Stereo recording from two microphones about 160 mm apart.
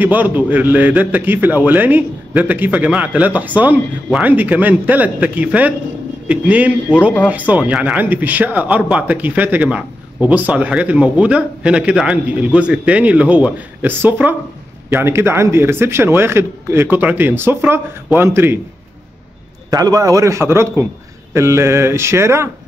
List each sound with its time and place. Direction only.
0.0 s speech: 10° right (ahead or behind)
19.7 s a man's voice: 25° right (ahead or behind)